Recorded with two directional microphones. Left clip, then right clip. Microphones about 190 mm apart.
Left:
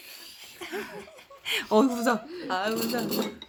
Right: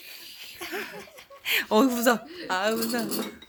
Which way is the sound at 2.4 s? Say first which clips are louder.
Right 3 dB; 20° right (ahead or behind).